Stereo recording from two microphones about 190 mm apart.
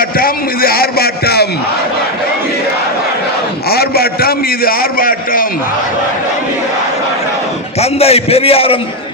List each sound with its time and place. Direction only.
0.0 s a man's voice: 50° left (ahead or behind)
3.7 s a man's voice: 55° left (ahead or behind)
7.8 s a man's voice: 30° left (ahead or behind)